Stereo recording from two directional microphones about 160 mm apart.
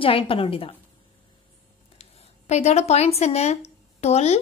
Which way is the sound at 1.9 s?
40° left (ahead or behind).